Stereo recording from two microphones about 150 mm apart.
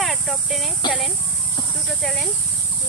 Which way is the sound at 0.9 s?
Centre (ahead or behind).